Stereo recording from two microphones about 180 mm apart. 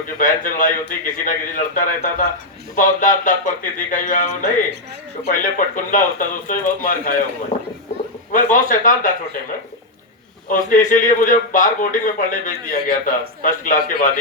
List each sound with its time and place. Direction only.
0.2 s a man's voice: 45° left (ahead or behind)
8.3 s a man's voice: 45° left (ahead or behind)
10.5 s a man's voice: 45° left (ahead or behind)